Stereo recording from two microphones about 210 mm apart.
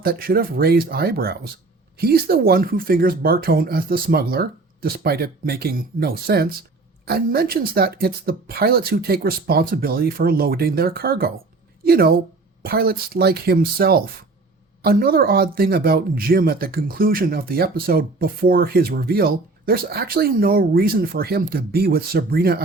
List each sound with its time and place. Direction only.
0.0 s speech: 45° right (ahead or behind)